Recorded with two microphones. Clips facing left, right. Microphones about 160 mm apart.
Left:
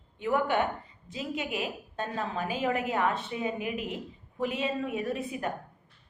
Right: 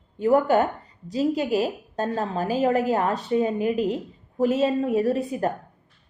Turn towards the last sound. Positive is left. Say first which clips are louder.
# right 9 dB
turn(degrees=-40)  # may be behind; listen again after turning